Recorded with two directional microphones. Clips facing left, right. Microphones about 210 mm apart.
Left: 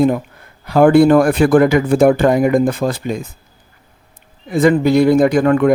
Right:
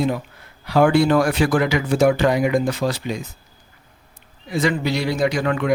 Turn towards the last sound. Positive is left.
turn(degrees=50)  # may be behind; listen again after turning